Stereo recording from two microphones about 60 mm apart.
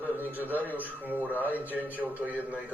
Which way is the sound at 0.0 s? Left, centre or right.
Right.